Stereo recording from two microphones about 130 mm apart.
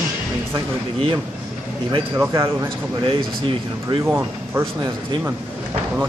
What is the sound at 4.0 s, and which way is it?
Speech, 20° right (ahead or behind).